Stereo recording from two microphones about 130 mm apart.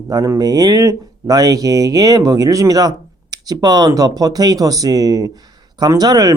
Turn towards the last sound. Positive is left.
turn(degrees=-30)  # may be behind; listen again after turning